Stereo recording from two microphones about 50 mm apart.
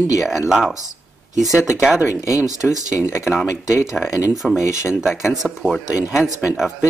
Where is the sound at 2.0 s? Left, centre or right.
Left.